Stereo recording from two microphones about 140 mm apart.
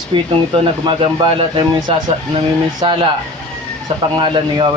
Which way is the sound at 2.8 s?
35° right (ahead or behind).